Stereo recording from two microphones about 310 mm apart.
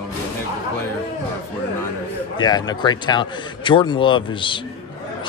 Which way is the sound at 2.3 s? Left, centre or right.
Centre.